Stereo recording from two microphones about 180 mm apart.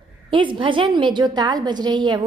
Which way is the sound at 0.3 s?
30° right (ahead or behind).